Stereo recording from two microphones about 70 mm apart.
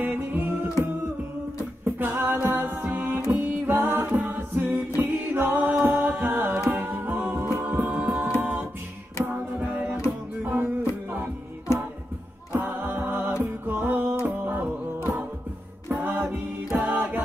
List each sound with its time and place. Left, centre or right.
0.0 s a capella: right
1.9 s a capella: right
3.3 s music: right
6.7 s a capella: right
7.6 s music: right
8.4 s a capella: right
10.4 s music: right
15.9 s a capella: right